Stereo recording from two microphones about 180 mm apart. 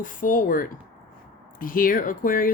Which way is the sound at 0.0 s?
50° left (ahead or behind).